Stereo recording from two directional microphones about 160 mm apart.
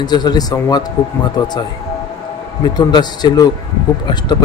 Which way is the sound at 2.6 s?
25° left (ahead or behind).